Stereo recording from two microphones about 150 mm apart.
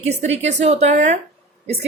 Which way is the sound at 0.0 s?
45° right (ahead or behind).